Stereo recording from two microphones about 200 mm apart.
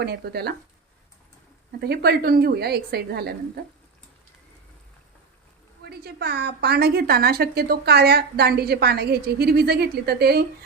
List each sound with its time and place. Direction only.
0.0 s a woman's voice: 55° right (ahead or behind)
1.8 s a woman's voice: 50° right (ahead or behind)
5.8 s a woman's voice: 55° right (ahead or behind)